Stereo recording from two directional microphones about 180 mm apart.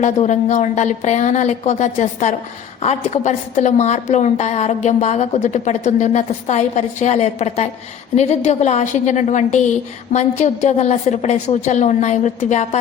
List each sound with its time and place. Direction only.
0.0 s a woman's voice: 40° left (ahead or behind)